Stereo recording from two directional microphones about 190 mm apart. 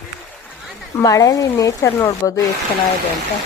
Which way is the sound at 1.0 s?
15° left (ahead or behind).